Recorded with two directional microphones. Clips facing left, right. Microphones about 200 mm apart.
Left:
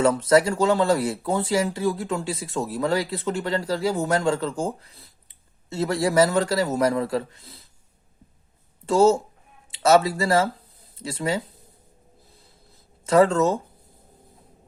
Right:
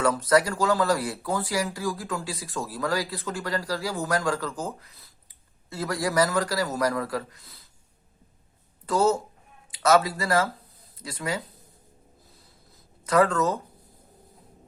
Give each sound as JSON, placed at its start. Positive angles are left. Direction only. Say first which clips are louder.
{"t": 0.0, "sound": "speech", "louder": "left 4 dB", "side_deg": 25}
{"t": 8.9, "sound": "speech", "louder": "left 5 dB", "side_deg": 25}
{"t": 13.1, "sound": "speech", "louder": "left 4 dB", "side_deg": 25}